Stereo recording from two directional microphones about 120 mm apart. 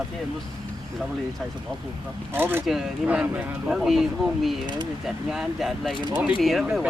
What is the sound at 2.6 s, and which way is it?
Speech, 5° right (ahead or behind).